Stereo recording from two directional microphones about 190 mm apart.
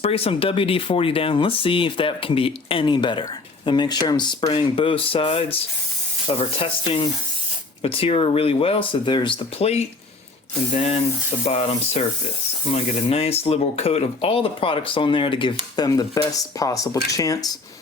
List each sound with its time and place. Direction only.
0.0 s speech: 30° left (ahead or behind)